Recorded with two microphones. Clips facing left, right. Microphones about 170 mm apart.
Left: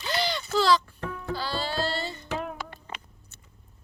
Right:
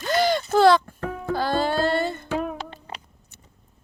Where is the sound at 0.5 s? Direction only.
55° right (ahead or behind).